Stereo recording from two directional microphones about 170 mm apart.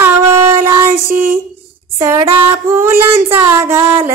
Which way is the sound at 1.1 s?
55° right (ahead or behind).